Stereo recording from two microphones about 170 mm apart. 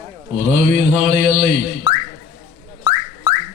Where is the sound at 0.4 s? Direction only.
55° right (ahead or behind).